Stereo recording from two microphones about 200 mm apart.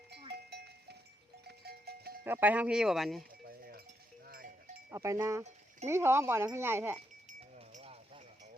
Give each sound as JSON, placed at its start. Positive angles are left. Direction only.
{"t": 0.5, "sound": "livestock", "side_deg": -55}
{"t": 1.5, "sound": "a sound", "side_deg": -55}
{"t": 2.2, "sound": "speech", "side_deg": -10}
{"t": 3.4, "sound": "sheep", "side_deg": -50}
{"t": 4.3, "sound": "livestock", "side_deg": -45}
{"t": 4.9, "sound": "speech", "side_deg": -15}
{"t": 7.5, "sound": "a sound", "side_deg": -35}